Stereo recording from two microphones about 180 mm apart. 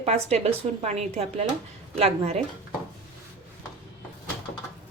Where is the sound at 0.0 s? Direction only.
35° right (ahead or behind).